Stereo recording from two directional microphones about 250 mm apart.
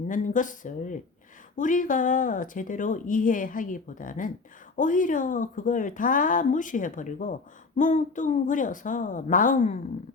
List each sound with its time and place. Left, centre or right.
0.1 s speech: left